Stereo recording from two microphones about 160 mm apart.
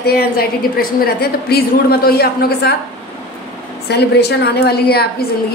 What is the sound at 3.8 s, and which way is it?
A woman's voice, 90° left.